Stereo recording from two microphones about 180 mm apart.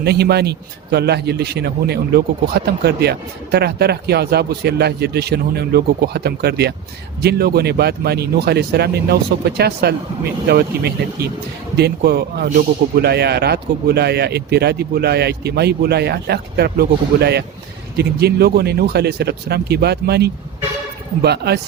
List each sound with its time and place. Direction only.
0.0 s a man's voice: 65° right (ahead or behind)